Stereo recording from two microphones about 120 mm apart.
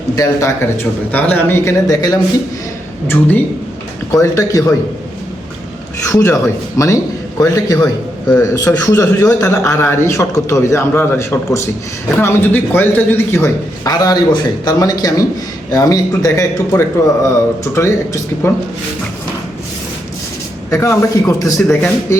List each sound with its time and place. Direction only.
0.2 s a man's voice: 25° left (ahead or behind)
1.9 s speech: 30° left (ahead or behind)
3.1 s speech: 15° left (ahead or behind)
4.1 s a man's voice: 25° left (ahead or behind)
6.1 s a man's voice: 20° left (ahead or behind)
20.7 s a man's voice: 25° left (ahead or behind)